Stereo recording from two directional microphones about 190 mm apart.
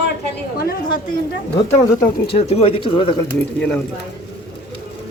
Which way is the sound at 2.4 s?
30° left (ahead or behind).